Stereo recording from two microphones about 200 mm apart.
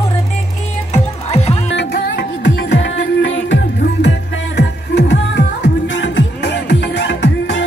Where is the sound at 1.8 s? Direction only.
60° left (ahead or behind).